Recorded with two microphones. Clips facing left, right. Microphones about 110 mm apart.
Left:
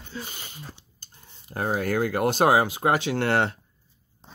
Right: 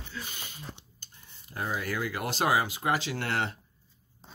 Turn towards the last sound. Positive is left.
turn(degrees=65)  # may be behind; listen again after turning